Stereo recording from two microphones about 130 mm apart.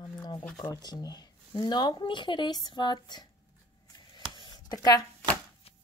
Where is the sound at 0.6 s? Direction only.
30° left (ahead or behind).